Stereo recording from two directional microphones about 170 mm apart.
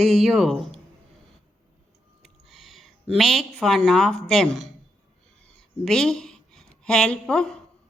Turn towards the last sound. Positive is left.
turn(degrees=5)  # may be behind; listen again after turning